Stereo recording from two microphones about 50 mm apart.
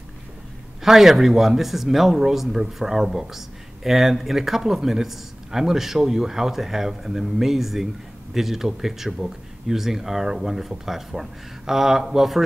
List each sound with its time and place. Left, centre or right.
0.8 s speech: centre